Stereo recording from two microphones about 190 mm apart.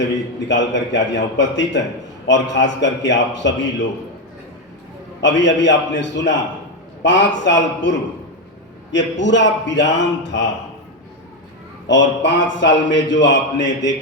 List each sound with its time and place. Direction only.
0.0 s a man's voice: 70° left (ahead or behind)
5.2 s a man's voice: 70° left (ahead or behind)
11.9 s a man's voice: 70° left (ahead or behind)